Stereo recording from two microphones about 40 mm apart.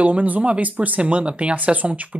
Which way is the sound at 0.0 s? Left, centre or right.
Right.